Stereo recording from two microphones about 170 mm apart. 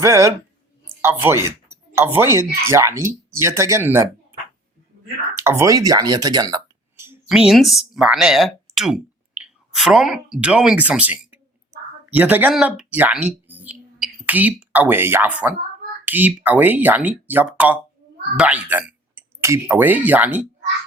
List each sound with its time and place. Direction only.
0.0 s speech: 15° right (ahead or behind)
7.3 s speech: centre (ahead or behind)
13.5 s a sound: 10° right (ahead or behind)
16.0 s speech: 10° right (ahead or behind)